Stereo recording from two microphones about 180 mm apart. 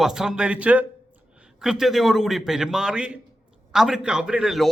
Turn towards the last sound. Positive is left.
turn(degrees=0)  # may be behind; listen again after turning